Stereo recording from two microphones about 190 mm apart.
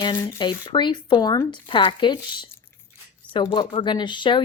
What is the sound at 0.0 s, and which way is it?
Speech, 25° left (ahead or behind).